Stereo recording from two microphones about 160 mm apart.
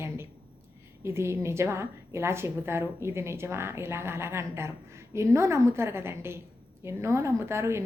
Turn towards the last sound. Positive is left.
turn(degrees=-15)  # may be behind; listen again after turning